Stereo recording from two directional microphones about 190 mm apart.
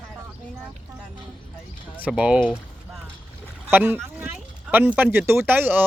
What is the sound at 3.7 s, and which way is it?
Speech, 10° right (ahead or behind).